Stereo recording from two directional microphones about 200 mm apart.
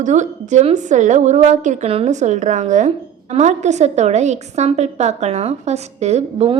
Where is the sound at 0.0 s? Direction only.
35° right (ahead or behind).